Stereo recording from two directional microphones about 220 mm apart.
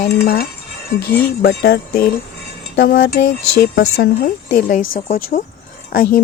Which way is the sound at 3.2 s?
45° left (ahead or behind).